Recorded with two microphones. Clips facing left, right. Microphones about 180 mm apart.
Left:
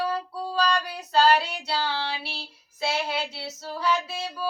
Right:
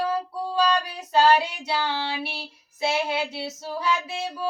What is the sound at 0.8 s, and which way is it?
Child singing, 20° right (ahead or behind).